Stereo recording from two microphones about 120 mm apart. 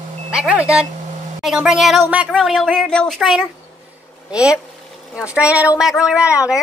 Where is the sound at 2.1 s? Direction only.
10° right (ahead or behind).